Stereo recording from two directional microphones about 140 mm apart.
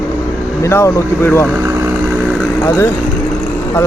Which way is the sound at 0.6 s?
20° left (ahead or behind).